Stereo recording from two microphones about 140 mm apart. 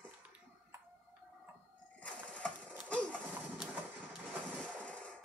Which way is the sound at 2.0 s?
10° left (ahead or behind).